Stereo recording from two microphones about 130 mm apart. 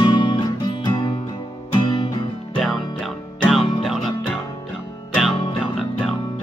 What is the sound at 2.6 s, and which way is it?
Music, centre (ahead or behind).